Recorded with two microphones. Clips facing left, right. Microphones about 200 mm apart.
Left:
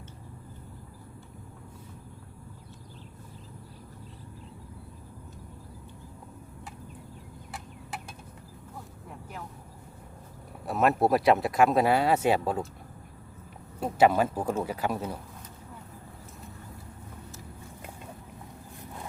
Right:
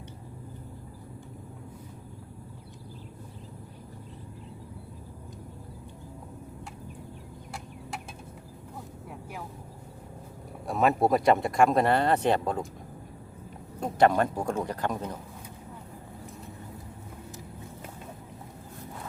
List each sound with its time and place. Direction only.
7.5 s a sound: centre (ahead or behind)
10.7 s speech: centre (ahead or behind)
13.7 s speech: 5° left (ahead or behind)